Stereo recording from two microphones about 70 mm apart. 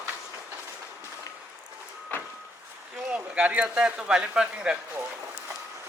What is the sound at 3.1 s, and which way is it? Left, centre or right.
Speech, centre.